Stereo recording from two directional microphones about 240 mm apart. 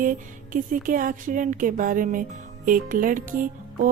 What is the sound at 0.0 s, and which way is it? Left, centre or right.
A woman's voice, right.